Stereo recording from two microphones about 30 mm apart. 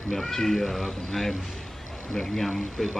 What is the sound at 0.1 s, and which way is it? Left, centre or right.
Speech, centre.